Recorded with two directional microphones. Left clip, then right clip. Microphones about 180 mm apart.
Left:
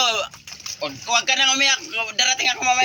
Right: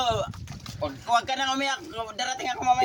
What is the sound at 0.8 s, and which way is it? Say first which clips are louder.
Speech: left 3 dB; 10° right (ahead or behind).